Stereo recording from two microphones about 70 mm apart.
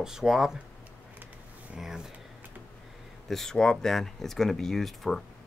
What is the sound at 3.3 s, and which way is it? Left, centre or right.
Speech, centre.